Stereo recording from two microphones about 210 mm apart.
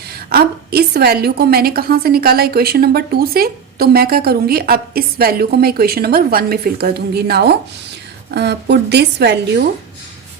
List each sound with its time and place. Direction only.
0.3 s a woman's voice: 50° right (ahead or behind)